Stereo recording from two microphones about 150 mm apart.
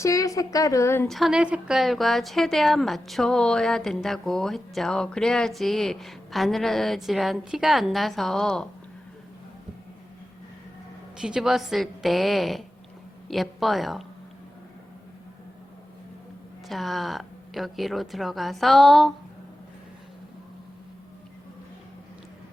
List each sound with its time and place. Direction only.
0.0 s a woman's voice: 20° left (ahead or behind)
1.0 s a woman's voice: centre (ahead or behind)
11.2 s a woman's voice: 5° right (ahead or behind)
16.6 s a woman's voice: centre (ahead or behind)